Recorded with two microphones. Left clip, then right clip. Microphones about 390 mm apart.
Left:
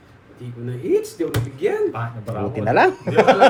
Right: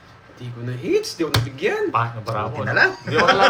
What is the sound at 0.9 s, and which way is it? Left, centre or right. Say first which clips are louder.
Speech: even; right.